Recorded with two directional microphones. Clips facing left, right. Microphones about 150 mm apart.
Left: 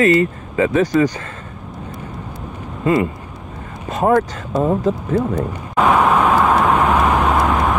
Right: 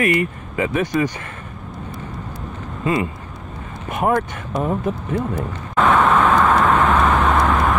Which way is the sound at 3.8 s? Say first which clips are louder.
Left 4 dB; 25° left (ahead or behind).